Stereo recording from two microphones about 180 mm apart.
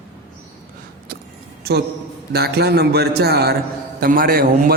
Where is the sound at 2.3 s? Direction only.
65° right (ahead or behind).